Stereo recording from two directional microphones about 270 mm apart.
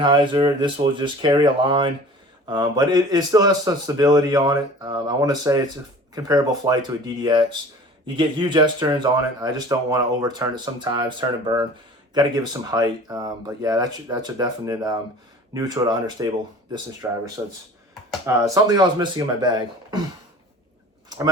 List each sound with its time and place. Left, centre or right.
0.0 s a man's voice: centre